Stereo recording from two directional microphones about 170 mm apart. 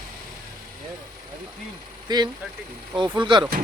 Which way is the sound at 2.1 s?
25° right (ahead or behind).